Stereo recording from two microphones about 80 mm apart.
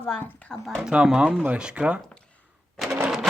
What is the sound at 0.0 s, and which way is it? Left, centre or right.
Speech, centre.